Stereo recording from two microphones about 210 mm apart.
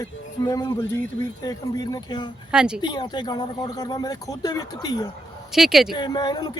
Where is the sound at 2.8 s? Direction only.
20° left (ahead or behind).